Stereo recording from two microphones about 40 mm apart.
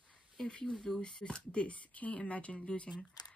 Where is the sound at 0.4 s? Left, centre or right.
Left.